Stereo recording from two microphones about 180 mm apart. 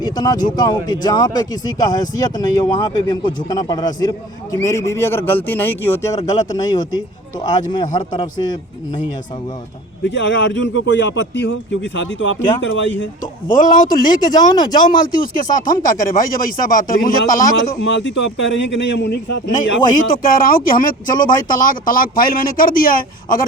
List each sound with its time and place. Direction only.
0.0 s speech: 20° left (ahead or behind)
10.1 s speech: 90° left
10.8 s speech: 75° left (ahead or behind)
13.5 s speech: 50° left (ahead or behind)
14.3 s speech: 25° left (ahead or behind)
14.8 s speech: 50° left (ahead or behind)
17.8 s speech: 80° left
20.1 s speech: 50° left (ahead or behind)